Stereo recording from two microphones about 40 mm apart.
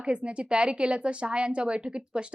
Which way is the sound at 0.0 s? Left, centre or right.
Right.